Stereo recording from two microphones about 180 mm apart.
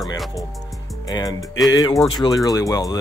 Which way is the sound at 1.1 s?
20° left (ahead or behind).